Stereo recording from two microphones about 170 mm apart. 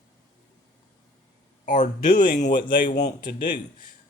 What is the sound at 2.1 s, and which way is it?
Speech, 50° left (ahead or behind).